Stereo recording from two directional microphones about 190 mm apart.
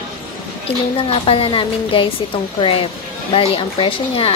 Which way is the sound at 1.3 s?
30° left (ahead or behind).